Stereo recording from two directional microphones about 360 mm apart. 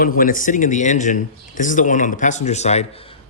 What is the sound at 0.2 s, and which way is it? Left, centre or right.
Speech, left.